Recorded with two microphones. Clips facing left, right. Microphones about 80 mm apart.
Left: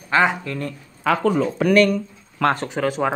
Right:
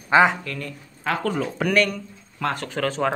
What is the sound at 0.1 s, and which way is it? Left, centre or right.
Speech, centre.